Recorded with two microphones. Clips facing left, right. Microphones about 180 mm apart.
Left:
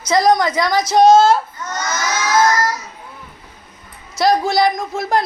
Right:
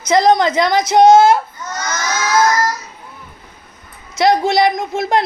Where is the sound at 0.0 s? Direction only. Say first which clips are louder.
Right 2 dB; 20° right (ahead or behind).